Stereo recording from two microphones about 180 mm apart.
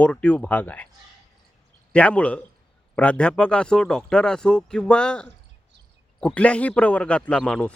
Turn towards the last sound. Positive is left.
turn(degrees=5)  # may be behind; listen again after turning